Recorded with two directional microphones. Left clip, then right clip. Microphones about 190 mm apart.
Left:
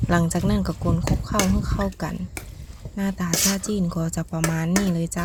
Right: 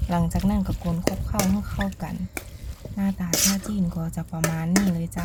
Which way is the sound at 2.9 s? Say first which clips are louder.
Left 1 dB; 25° left (ahead or behind).